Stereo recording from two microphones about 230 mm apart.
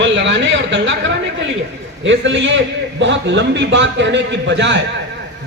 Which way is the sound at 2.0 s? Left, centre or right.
Right.